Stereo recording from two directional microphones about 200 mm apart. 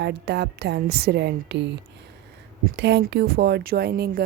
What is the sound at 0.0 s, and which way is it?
A woman's voice, 55° right (ahead or behind).